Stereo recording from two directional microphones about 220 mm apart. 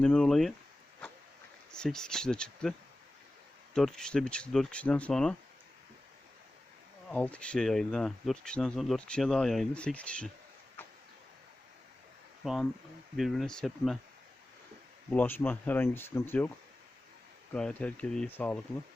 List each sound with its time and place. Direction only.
0.0 s speech: 5° left (ahead or behind)
1.7 s speech: 5° left (ahead or behind)
3.8 s speech: 5° left (ahead or behind)
7.1 s speech: 5° left (ahead or behind)
12.4 s speech: centre (ahead or behind)
15.1 s speech: 10° left (ahead or behind)
17.5 s speech: 5° left (ahead or behind)